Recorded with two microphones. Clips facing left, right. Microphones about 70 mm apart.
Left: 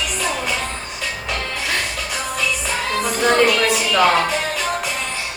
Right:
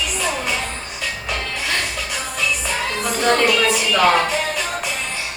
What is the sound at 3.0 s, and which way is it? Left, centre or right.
Music, centre.